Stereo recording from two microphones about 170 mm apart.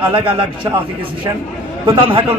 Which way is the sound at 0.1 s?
30° right (ahead or behind).